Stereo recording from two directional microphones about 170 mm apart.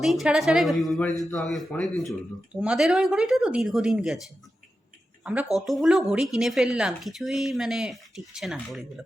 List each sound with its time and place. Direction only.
0.0 s speech: centre (ahead or behind)
5.2 s speech: 5° right (ahead or behind)